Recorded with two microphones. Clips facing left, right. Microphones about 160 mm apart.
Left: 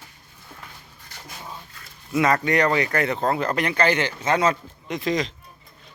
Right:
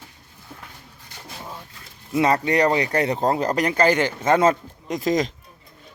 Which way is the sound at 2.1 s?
30° right (ahead or behind).